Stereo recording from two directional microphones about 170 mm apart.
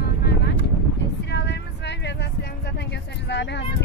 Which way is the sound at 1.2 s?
85° left.